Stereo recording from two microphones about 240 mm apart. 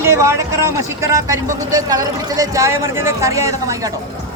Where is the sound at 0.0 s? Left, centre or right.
Centre.